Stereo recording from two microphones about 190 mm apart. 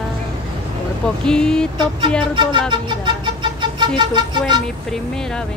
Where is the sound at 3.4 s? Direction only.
25° right (ahead or behind).